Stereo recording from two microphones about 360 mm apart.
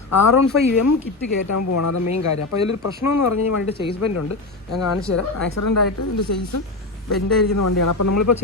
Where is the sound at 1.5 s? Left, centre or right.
Left.